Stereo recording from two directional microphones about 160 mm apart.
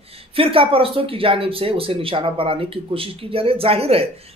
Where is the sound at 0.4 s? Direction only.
35° right (ahead or behind).